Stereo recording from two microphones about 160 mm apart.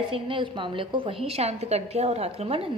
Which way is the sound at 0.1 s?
30° right (ahead or behind).